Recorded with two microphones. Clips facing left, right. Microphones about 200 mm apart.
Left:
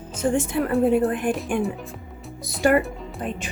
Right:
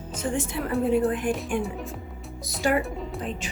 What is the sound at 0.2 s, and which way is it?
Speech, 45° left (ahead or behind).